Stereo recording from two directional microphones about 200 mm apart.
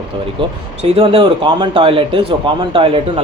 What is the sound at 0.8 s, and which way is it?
Speech, 30° right (ahead or behind).